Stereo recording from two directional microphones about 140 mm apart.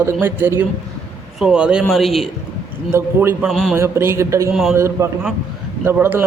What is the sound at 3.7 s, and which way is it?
Speech, 15° right (ahead or behind).